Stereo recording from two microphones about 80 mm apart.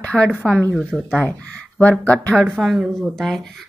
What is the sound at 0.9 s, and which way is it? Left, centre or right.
Speech, centre.